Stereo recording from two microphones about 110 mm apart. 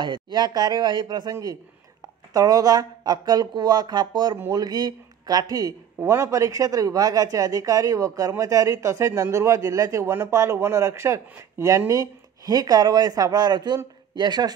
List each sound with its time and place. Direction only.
0.0 s a man's voice: 45° right (ahead or behind)